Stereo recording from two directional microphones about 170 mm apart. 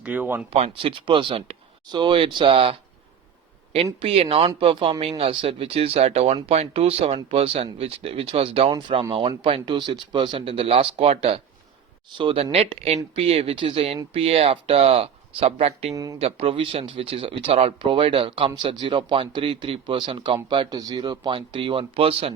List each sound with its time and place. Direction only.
0.0 s speech: 10° right (ahead or behind)
0.5 s speech: 30° right (ahead or behind)
4.0 s speech: 35° right (ahead or behind)